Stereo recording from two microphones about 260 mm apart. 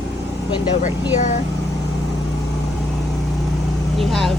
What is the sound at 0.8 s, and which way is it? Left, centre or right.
Speech, left.